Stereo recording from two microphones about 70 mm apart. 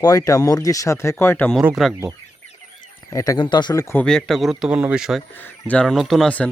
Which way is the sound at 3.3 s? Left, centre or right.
Left.